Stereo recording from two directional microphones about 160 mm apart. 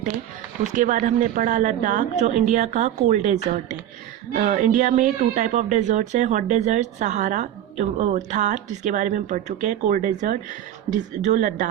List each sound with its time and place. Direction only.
0.6 s speech: 50° right (ahead or behind)
4.4 s speech: 55° right (ahead or behind)